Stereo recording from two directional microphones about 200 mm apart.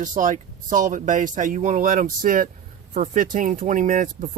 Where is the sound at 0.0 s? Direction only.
40° right (ahead or behind).